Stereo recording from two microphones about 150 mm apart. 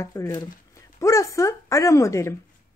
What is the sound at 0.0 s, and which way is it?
Speech, 20° left (ahead or behind).